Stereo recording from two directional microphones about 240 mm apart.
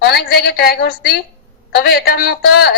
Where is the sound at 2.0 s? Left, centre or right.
Left.